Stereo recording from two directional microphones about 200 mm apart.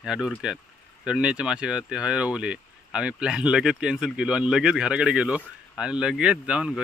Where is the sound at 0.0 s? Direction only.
5° right (ahead or behind).